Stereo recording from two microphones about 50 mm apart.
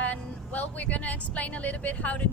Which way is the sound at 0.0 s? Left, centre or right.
Left.